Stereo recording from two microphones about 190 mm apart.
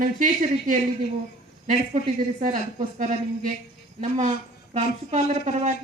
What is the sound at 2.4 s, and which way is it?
A woman's voice, 40° right (ahead or behind).